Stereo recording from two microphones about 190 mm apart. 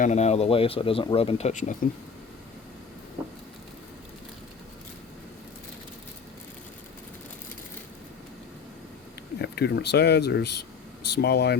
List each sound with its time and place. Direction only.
0.0 s speech: 35° left (ahead or behind)
9.4 s speech: 65° left (ahead or behind)